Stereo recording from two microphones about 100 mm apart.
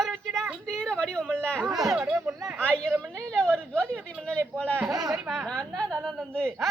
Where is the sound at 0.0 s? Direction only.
5° left (ahead or behind).